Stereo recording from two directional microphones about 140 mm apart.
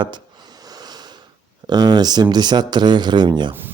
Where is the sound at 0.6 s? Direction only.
30° right (ahead or behind).